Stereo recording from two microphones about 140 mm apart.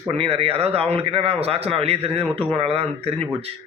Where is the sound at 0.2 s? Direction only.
45° right (ahead or behind).